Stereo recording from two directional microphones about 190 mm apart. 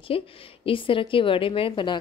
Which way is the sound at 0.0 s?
30° left (ahead or behind).